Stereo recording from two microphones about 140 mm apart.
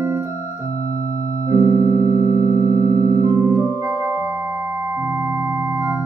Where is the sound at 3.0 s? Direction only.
25° right (ahead or behind).